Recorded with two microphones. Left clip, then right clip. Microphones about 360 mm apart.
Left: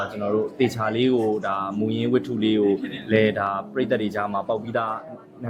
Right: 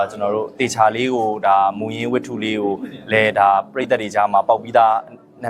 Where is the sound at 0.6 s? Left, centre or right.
Right.